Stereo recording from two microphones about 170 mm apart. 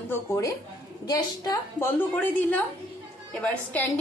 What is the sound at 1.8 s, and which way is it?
A woman's voice, 10° left (ahead or behind).